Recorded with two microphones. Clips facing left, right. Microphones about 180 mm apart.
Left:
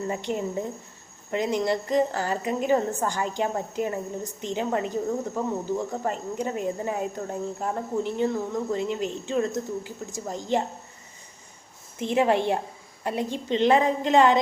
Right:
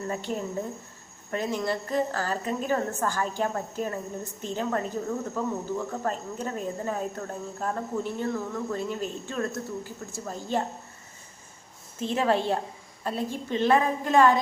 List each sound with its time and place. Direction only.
0.1 s speech: 15° left (ahead or behind)
11.9 s a woman's voice: 15° left (ahead or behind)